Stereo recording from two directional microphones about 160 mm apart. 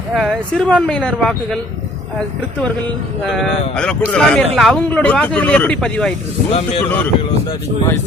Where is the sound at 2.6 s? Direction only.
Centre (ahead or behind).